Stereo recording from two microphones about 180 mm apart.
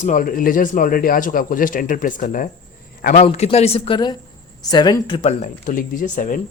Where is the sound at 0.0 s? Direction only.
45° left (ahead or behind).